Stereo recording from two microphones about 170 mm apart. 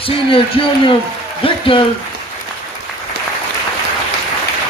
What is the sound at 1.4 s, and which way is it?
Speech, 30° left (ahead or behind).